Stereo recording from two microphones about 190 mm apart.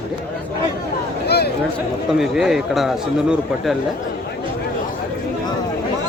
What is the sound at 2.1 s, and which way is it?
A man's voice, centre (ahead or behind).